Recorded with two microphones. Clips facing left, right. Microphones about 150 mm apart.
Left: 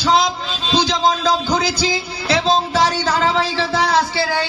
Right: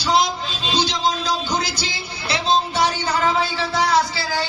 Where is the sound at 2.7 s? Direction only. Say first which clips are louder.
Left 3 dB; 90° left; by 4.4 s 70° left (ahead or behind).